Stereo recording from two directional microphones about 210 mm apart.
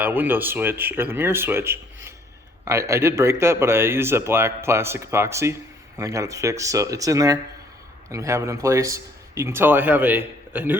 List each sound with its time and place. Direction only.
0.0 s a man's voice: 10° right (ahead or behind)